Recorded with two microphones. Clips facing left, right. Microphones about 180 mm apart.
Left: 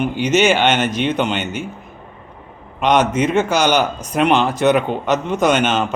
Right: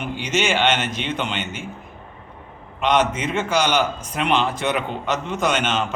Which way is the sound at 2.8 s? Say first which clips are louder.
Left 4 dB; 45° left (ahead or behind).